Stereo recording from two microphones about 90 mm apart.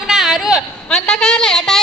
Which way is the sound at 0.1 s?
5° right (ahead or behind).